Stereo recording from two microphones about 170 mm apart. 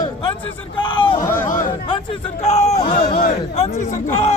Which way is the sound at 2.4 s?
35° left (ahead or behind).